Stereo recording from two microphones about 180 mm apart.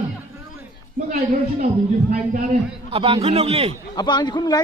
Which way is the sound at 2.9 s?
30° right (ahead or behind).